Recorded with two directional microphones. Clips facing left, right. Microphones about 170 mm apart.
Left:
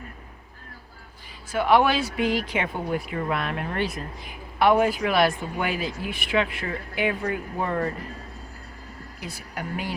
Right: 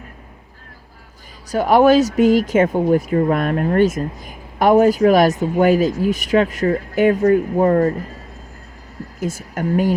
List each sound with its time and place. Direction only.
1.5 s speech: 40° right (ahead or behind)
9.2 s speech: 45° right (ahead or behind)